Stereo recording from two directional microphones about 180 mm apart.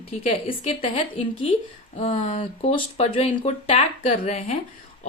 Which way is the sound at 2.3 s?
35° left (ahead or behind).